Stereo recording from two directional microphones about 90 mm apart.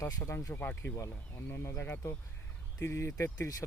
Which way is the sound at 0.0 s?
25° left (ahead or behind).